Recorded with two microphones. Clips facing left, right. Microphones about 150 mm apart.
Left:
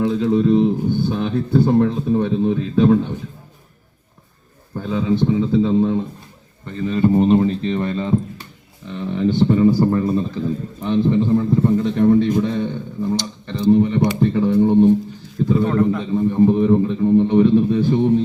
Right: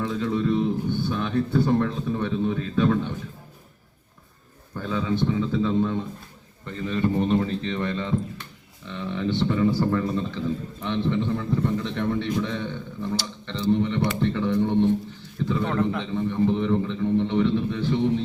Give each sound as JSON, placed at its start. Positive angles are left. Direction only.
{"t": 0.0, "sound": "a man's voice", "side_deg": 35}
{"t": 4.7, "sound": "a man's voice", "side_deg": 30}
{"t": 14.2, "sound": "a sound", "side_deg": 40}
{"t": 15.6, "sound": "a man's voice", "side_deg": 10}
{"t": 16.1, "sound": "a man's voice", "side_deg": 40}